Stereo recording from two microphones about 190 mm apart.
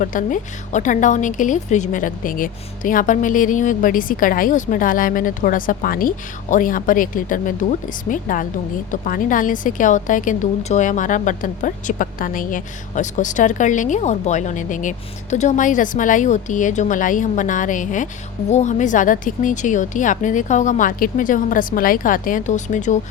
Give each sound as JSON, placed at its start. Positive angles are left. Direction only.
{"t": 0.0, "sound": "a woman's voice", "side_deg": 45}